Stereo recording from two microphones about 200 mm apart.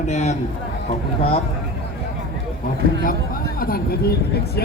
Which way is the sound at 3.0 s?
45° left (ahead or behind).